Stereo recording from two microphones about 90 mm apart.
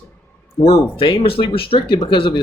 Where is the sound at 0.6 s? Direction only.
90° left.